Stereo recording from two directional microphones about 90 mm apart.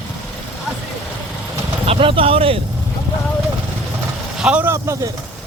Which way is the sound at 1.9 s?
85° right.